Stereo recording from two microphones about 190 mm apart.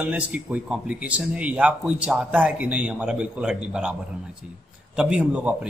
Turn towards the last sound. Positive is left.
turn(degrees=-5)  # may be behind; listen again after turning